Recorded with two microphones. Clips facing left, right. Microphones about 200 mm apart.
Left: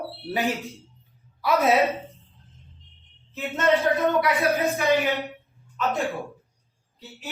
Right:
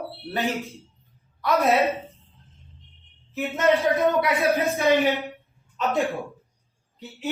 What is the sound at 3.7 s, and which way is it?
Speech, 15° right (ahead or behind).